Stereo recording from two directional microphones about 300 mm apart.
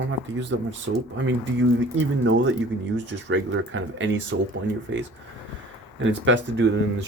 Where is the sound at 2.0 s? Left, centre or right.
Right.